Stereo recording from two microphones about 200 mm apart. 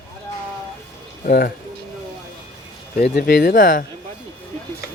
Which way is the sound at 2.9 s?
50° left (ahead or behind).